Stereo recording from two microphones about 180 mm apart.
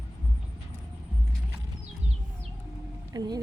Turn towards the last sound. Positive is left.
turn(degrees=-20)  # may be behind; listen again after turning